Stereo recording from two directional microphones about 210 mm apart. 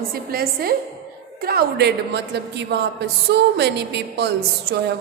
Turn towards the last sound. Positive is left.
turn(degrees=-55)  # may be behind; listen again after turning